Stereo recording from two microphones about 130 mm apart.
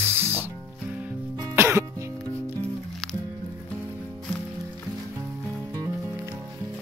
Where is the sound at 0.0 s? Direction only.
15° right (ahead or behind).